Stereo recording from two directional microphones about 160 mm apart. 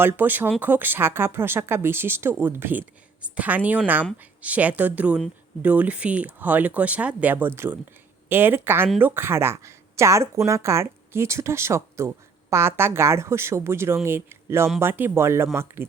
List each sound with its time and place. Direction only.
0.0 s speech: 10° right (ahead or behind)